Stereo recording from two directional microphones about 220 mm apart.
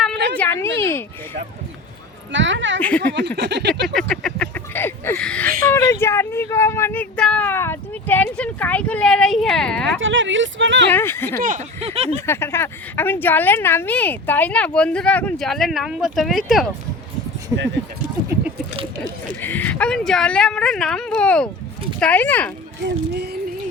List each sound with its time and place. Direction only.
0.3 s speech: 10° left (ahead or behind)
2.3 s speech: 55° right (ahead or behind)
3.2 s a sound: 50° right (ahead or behind)
4.1 s speech: centre (ahead or behind)
10.0 s speech: 60° right (ahead or behind)
10.9 s speech: 10° left (ahead or behind)
11.3 s speech: 35° right (ahead or behind)
12.2 s speech: 10° left (ahead or behind)
17.5 s speech: 10° right (ahead or behind)
19.4 s speech: 10° left (ahead or behind)
22.8 s a sound: 50° right (ahead or behind)